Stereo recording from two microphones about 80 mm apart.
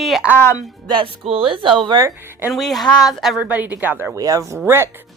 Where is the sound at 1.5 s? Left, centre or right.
Right.